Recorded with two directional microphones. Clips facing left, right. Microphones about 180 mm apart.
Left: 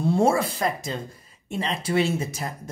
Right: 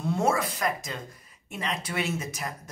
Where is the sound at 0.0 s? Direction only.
30° left (ahead or behind).